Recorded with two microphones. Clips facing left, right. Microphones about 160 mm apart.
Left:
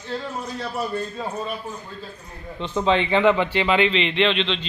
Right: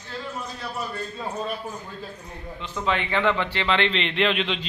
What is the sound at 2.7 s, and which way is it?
A man's voice, 25° left (ahead or behind).